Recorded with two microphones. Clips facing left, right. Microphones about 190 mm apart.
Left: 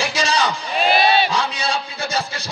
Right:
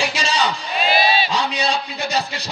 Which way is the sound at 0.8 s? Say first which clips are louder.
Left 2 dB; 55° left (ahead or behind).